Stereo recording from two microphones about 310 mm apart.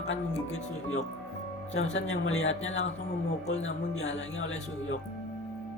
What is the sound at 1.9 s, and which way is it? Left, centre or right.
Music, left.